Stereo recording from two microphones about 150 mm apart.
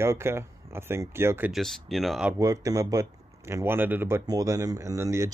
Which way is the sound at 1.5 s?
Centre (ahead or behind).